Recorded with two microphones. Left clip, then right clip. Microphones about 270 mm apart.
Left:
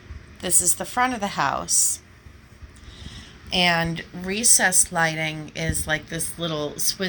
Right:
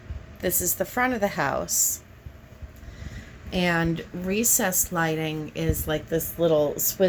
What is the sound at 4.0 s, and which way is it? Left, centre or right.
A woman's voice, centre.